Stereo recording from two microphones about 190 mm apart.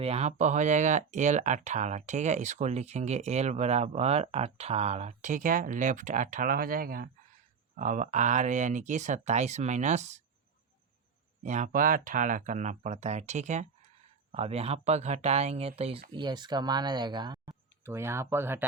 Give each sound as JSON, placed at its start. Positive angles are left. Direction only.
{"t": 0.0, "sound": "speech", "side_deg": -35}
{"t": 11.4, "sound": "speech", "side_deg": -40}
{"t": 17.8, "sound": "speech", "side_deg": -15}